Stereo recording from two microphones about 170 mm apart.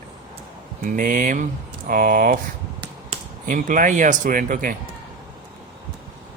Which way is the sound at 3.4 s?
50° right (ahead or behind).